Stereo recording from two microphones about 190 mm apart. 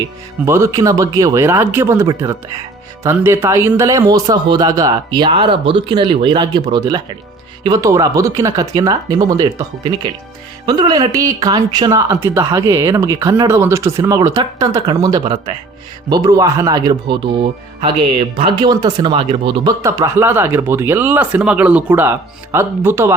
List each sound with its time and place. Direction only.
0.4 s speech: 15° right (ahead or behind)
19.8 s speech: 15° right (ahead or behind)